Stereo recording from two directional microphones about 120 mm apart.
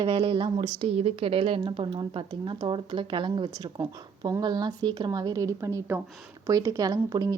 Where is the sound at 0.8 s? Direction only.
60° right (ahead or behind); by 6.0 s 25° right (ahead or behind).